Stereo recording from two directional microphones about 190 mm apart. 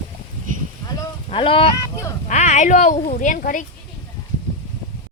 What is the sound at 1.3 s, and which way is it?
Speech, 30° left (ahead or behind).